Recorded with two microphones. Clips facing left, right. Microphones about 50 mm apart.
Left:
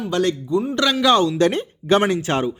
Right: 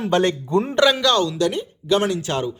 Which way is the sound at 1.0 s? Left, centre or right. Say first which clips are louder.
Left 3 dB; left.